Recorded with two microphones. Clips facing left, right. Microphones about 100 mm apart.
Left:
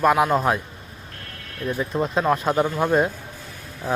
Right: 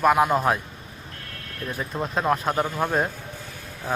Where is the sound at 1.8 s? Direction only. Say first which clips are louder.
Left 4 dB; centre (ahead or behind).